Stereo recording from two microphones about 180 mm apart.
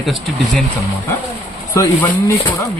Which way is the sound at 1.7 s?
15° left (ahead or behind).